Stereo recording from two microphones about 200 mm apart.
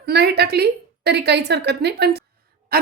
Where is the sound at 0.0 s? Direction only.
55° right (ahead or behind).